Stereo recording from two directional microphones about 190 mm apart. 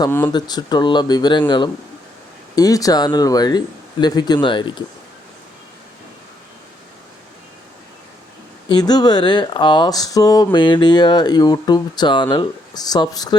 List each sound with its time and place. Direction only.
0.0 s speech: 10° left (ahead or behind)
8.7 s speech: 20° left (ahead or behind)